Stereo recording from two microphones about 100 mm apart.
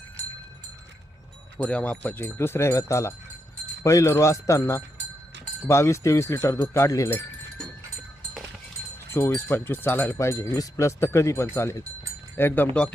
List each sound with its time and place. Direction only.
1.5 s speech: 10° left (ahead or behind); by 7.1 s 30° left (ahead or behind)
9.0 s speech: 25° left (ahead or behind)